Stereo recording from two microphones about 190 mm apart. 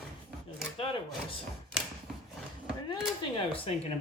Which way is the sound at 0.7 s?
25° left (ahead or behind).